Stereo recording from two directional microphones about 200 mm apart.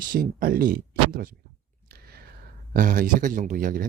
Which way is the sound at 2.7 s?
45° right (ahead or behind).